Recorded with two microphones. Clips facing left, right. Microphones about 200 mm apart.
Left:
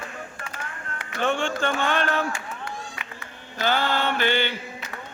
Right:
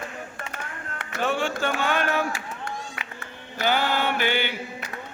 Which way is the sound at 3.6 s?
15° right (ahead or behind).